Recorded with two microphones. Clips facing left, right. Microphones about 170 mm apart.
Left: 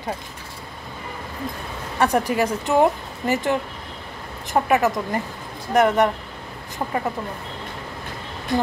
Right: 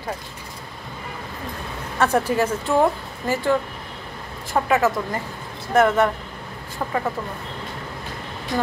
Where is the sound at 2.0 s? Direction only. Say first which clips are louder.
Even; 15° left (ahead or behind).